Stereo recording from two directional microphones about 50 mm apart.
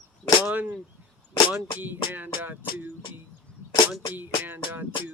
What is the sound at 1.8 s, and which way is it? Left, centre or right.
Music, right.